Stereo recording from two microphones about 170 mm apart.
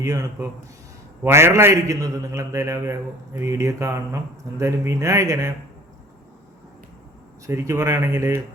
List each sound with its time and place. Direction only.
0.0 s a man's voice: 20° right (ahead or behind)
7.4 s a man's voice: 15° right (ahead or behind)